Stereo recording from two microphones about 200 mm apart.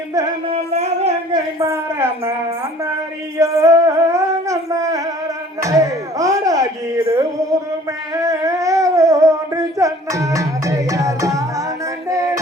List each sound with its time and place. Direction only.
0.1 s a woman's voice: 15° right (ahead or behind)
0.5 s a sound: 30° right (ahead or behind)
1.3 s a woman's voice: 15° right (ahead or behind)
3.3 s music: 15° right (ahead or behind)
5.5 s a sound: 15° right (ahead or behind)
12.0 s music: 15° right (ahead or behind)